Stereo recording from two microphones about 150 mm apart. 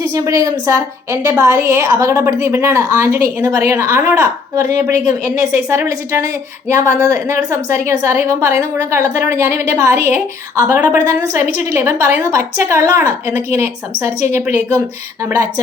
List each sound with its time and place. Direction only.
0.0 s a woman's voice: 20° right (ahead or behind)